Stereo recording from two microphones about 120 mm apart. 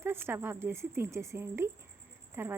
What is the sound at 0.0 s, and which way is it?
Speech, 20° right (ahead or behind).